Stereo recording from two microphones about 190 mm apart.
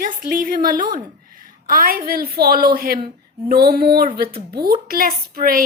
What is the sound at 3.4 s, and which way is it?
Female singing, 55° right (ahead or behind).